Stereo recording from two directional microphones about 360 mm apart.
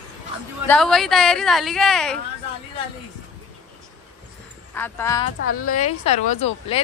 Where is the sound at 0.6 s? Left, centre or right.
Centre.